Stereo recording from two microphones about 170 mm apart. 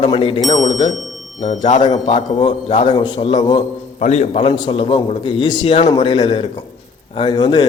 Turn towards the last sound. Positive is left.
turn(degrees=25)  # may be behind; listen again after turning